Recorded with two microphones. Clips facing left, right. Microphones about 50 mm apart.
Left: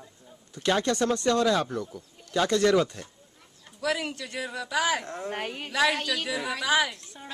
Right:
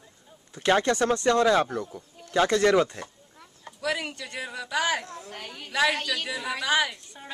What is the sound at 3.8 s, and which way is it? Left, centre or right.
A woman's voice, centre.